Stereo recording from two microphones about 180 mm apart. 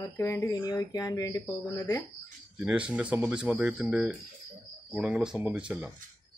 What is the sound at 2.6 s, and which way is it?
Speech, 5° right (ahead or behind).